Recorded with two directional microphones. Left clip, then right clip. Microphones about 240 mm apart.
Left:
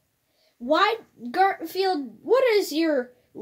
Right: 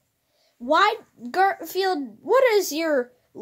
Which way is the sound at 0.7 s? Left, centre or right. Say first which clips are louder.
Right 2 dB; right.